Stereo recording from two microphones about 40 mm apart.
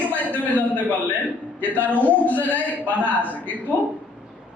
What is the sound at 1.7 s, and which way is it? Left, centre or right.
Speech, left.